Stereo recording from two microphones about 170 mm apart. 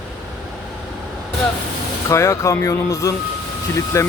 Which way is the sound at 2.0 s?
15° left (ahead or behind).